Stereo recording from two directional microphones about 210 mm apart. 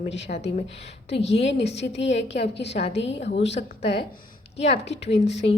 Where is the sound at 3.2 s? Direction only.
30° left (ahead or behind).